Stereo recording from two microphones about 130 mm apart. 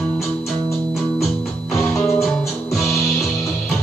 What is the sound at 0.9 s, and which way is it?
Music, centre (ahead or behind).